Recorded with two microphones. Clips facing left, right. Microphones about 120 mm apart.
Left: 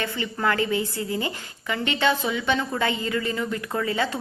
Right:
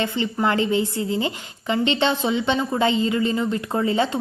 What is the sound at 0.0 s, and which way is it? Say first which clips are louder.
A woman's voice: right 4 dB; 20° right (ahead or behind).